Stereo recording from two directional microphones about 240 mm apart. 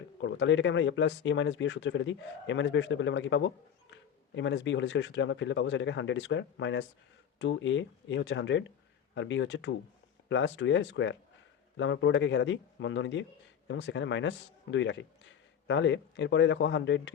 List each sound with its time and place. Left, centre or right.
0.2 s speech: left